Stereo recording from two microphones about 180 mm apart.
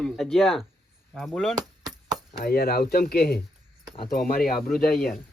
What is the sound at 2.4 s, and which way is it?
Speech, 55° left (ahead or behind).